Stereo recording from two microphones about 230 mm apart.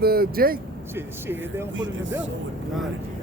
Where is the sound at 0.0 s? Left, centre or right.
Right.